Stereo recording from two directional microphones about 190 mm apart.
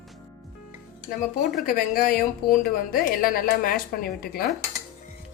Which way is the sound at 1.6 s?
50° left (ahead or behind).